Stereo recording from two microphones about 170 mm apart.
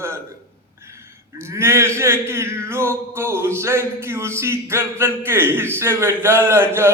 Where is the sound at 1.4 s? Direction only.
15° right (ahead or behind).